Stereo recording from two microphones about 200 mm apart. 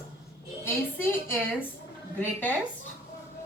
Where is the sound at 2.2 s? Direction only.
10° left (ahead or behind).